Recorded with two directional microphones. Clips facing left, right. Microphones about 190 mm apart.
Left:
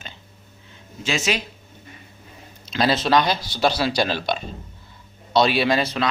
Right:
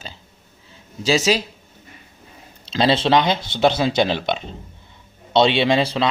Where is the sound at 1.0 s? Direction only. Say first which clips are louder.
Right 6 dB; 35° right (ahead or behind).